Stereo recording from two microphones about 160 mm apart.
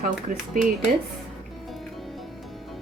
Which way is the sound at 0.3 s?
55° right (ahead or behind).